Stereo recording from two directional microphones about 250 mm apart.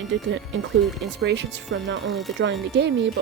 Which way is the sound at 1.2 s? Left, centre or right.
Right.